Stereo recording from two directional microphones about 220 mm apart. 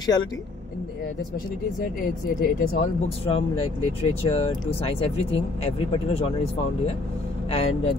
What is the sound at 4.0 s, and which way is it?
Speech, 25° left (ahead or behind).